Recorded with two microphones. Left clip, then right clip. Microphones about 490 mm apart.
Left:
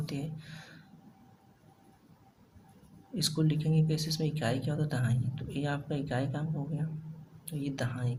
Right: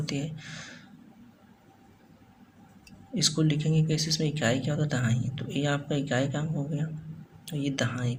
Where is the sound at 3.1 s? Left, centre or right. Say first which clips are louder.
Right 5 dB; left.